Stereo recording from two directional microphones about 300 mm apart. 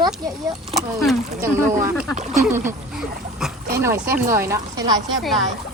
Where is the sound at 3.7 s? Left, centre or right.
Centre.